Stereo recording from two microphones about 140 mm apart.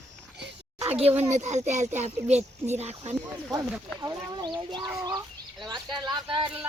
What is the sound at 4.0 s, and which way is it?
Speech, 30° right (ahead or behind).